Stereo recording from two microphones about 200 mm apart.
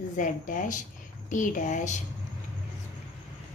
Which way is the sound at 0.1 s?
40° left (ahead or behind).